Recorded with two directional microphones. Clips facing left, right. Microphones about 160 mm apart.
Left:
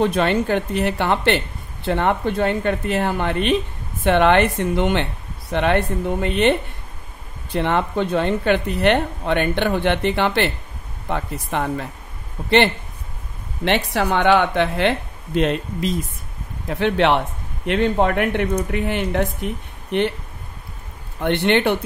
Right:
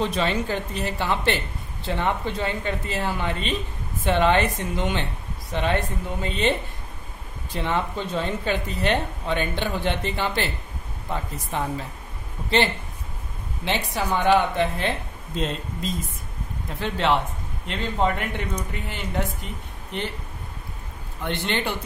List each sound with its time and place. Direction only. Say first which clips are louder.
0.0 s speech: left 6 dB; 60° left (ahead or behind)
7.5 s speech: left 6 dB; 60° left (ahead or behind)
21.2 s speech: left 9 dB; 65° left (ahead or behind)